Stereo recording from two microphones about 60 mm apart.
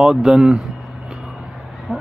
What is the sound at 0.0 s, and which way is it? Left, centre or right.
Speech, centre.